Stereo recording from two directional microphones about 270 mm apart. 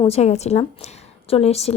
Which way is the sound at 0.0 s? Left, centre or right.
Left.